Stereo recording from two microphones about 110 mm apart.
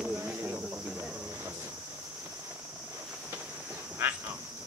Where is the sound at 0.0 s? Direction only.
15° right (ahead or behind).